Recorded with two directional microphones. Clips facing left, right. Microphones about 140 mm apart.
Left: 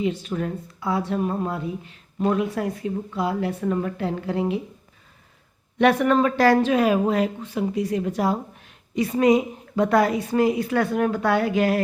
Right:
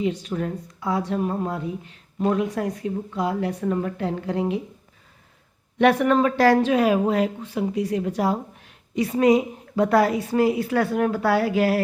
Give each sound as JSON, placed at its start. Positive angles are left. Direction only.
{"t": 0.3, "sound": "a woman's voice", "side_deg": -40}
{"t": 5.8, "sound": "a woman's voice", "side_deg": -30}